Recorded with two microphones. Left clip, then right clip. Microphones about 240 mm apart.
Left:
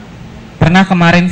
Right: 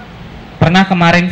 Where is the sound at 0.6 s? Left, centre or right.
Left.